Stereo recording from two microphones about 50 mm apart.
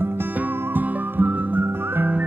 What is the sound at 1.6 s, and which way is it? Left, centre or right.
Music, right.